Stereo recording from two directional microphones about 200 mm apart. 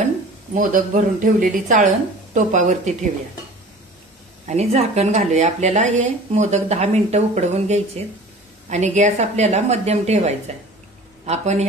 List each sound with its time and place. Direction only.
0.6 s speech: 40° right (ahead or behind)
4.5 s speech: 35° right (ahead or behind)